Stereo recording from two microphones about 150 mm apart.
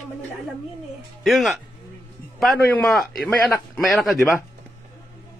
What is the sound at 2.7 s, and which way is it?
A man's voice, 5° left (ahead or behind).